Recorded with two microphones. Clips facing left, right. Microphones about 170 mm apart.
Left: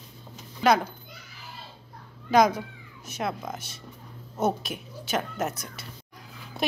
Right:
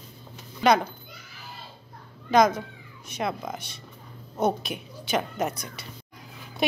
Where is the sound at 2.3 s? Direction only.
10° left (ahead or behind).